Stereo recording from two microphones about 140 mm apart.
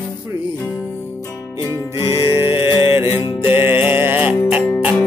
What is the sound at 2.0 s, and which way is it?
Music, 40° left (ahead or behind).